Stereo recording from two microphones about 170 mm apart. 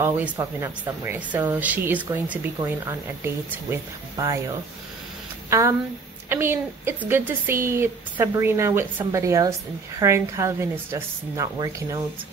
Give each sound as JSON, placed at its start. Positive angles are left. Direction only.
{"t": 0.0, "sound": "speech", "side_deg": -15}